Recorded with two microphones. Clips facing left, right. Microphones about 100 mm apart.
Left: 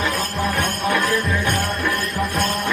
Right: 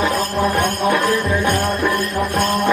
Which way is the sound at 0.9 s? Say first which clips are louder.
Right 3 dB; 40° right (ahead or behind).